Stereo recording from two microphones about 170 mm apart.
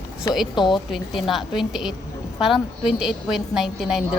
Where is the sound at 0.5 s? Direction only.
25° left (ahead or behind).